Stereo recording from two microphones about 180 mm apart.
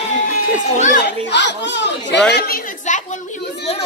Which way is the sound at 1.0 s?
75° left (ahead or behind).